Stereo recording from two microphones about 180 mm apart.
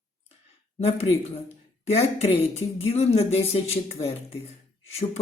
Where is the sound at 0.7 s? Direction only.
35° left (ahead or behind).